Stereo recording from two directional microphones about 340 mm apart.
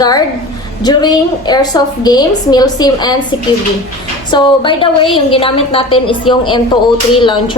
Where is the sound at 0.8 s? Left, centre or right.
Centre.